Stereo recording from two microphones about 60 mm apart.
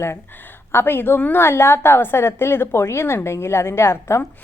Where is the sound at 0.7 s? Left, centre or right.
Left.